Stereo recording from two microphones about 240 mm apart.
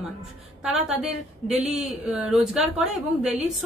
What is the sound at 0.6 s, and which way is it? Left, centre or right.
A woman's voice, centre.